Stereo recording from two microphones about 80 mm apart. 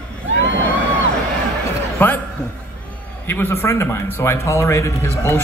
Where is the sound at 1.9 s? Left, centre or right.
Left.